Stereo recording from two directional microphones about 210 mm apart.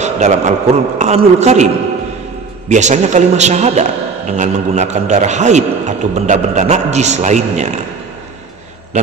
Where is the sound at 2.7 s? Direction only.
35° right (ahead or behind).